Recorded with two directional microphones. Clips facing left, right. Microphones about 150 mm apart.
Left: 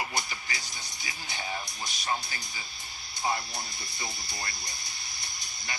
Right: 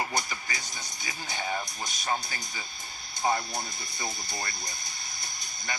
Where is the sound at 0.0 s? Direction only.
45° right (ahead or behind).